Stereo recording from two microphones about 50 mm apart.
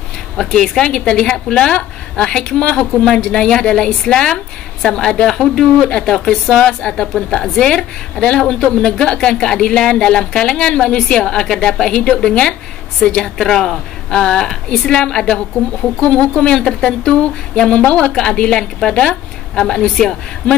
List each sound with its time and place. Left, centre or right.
0.4 s a woman's voice: centre
3.2 s a woman's voice: centre